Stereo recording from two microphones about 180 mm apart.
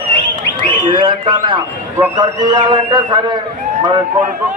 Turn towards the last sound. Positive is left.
turn(degrees=-25)  # may be behind; listen again after turning